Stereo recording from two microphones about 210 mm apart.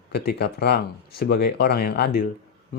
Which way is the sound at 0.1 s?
50° left (ahead or behind).